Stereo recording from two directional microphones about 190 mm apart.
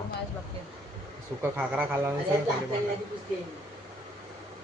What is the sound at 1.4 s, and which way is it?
Speech, 10° right (ahead or behind).